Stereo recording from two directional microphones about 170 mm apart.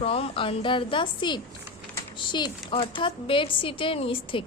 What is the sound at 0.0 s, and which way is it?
A woman's voice, 35° left (ahead or behind).